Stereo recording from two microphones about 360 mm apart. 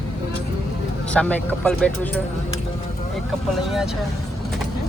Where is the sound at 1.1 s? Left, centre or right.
Centre.